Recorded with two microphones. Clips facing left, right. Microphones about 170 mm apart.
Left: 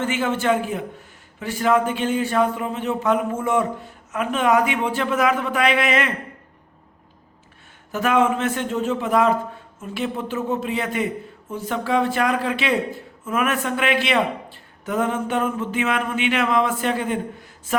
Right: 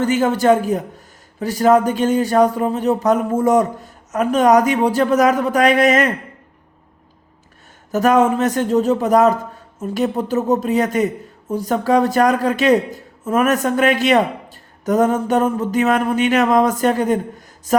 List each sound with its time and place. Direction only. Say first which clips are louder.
0.0 s a man's voice: right 6 dB; 40° right (ahead or behind)
7.9 s a man's voice: right 5 dB; 40° right (ahead or behind)